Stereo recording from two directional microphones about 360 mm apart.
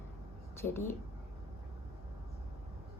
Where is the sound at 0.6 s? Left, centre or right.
Left.